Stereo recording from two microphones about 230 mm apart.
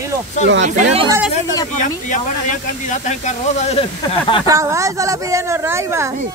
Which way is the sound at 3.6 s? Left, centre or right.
Left.